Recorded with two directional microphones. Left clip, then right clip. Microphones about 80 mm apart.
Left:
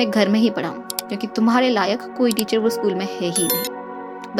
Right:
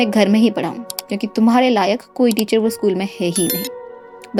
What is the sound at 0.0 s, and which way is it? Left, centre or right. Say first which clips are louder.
Speech: right 3 dB; right.